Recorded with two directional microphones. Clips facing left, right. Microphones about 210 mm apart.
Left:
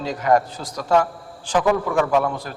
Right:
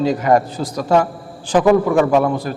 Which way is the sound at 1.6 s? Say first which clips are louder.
Right 8 dB; 20° right (ahead or behind).